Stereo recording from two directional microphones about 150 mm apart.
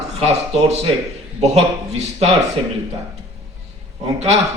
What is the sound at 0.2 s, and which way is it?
A man's voice, 45° right (ahead or behind).